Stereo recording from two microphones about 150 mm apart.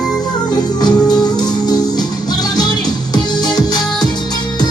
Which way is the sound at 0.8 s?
25° left (ahead or behind).